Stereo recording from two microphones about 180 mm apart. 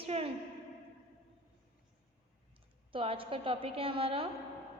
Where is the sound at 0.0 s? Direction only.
35° right (ahead or behind).